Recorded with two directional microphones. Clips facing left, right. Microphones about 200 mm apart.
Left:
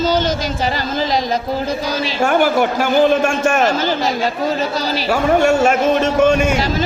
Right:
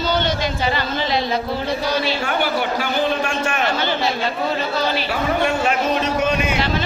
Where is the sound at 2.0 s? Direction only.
45° left (ahead or behind).